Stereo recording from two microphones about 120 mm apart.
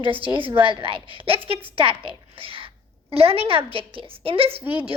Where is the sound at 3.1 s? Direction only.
55° right (ahead or behind).